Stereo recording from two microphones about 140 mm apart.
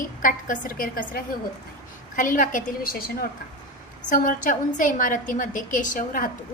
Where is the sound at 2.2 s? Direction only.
70° left (ahead or behind); by 3.3 s 90° left.